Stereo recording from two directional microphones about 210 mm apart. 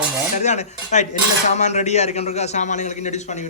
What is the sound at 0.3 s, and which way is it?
A man's voice, 30° left (ahead or behind).